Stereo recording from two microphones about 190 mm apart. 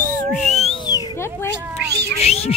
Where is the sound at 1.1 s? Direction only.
15° left (ahead or behind).